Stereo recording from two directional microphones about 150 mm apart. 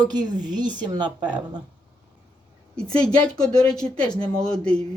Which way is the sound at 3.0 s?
5° left (ahead or behind).